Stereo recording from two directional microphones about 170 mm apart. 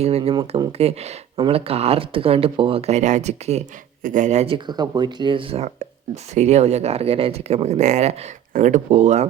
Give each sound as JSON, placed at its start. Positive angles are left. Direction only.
{"t": 0.0, "sound": "speech", "side_deg": -35}